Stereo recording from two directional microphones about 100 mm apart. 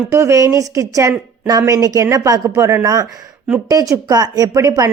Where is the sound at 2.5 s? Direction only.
25° right (ahead or behind).